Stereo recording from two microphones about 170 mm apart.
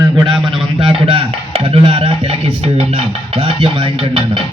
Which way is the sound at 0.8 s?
30° right (ahead or behind).